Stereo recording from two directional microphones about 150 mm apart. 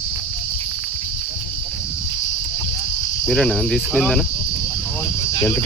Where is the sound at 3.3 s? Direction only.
5° left (ahead or behind).